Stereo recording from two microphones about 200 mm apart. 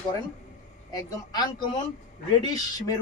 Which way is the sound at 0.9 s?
20° left (ahead or behind).